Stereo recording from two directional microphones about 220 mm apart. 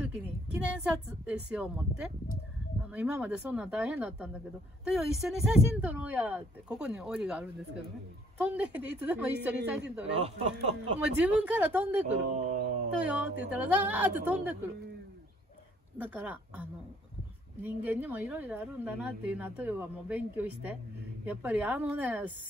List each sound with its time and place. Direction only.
0.1 s a woman's voice: 5° right (ahead or behind)
10.1 s speech: 25° right (ahead or behind)
11.0 s a woman's voice: 5° right (ahead or behind)
12.3 s speech: 35° right (ahead or behind)
13.6 s a woman's voice: 10° right (ahead or behind)
16.0 s a woman's voice: 5° right (ahead or behind)